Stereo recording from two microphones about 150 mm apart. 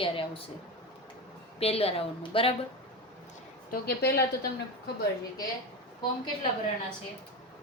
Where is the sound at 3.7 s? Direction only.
90° left.